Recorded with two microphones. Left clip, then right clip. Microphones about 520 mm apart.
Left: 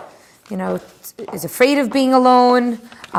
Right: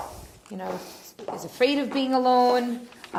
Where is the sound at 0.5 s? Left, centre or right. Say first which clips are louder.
Left 10 dB; left.